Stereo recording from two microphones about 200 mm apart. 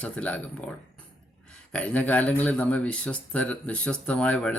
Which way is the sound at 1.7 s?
5° left (ahead or behind).